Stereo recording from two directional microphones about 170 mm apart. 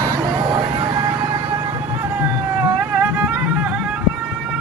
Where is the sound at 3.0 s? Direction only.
10° right (ahead or behind).